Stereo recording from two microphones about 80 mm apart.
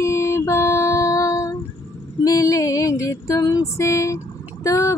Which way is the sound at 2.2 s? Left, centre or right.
Left.